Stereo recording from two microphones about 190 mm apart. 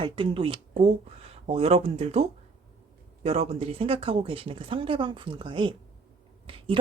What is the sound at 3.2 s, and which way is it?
A woman's voice, 35° right (ahead or behind).